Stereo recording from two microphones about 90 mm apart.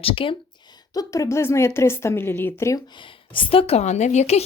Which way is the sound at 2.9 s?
65° left (ahead or behind).